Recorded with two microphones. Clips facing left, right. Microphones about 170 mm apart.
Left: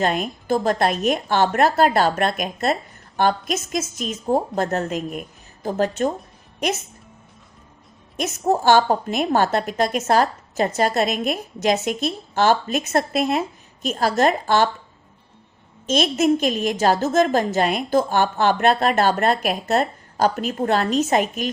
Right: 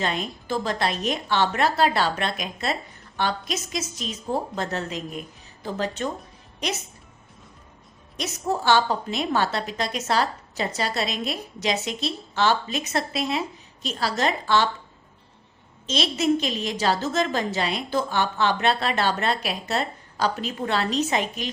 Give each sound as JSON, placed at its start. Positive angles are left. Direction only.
{"t": 0.0, "sound": "a woman's voice", "side_deg": 50}
{"t": 8.1, "sound": "a woman's voice", "side_deg": 45}
{"t": 15.9, "sound": "a woman's voice", "side_deg": 50}